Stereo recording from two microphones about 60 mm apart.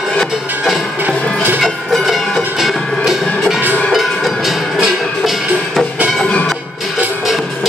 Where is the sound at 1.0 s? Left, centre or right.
Right.